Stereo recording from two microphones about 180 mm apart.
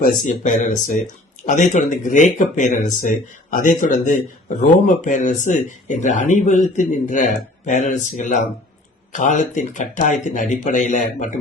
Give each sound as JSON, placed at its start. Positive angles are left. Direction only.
{"t": 0.3, "sound": "speech", "side_deg": 45}